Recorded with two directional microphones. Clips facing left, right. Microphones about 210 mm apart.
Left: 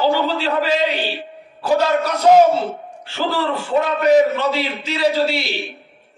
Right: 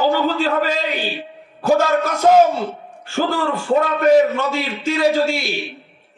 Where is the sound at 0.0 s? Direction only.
45° right (ahead or behind).